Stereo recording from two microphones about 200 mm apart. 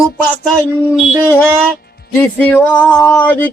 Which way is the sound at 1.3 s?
5° left (ahead or behind).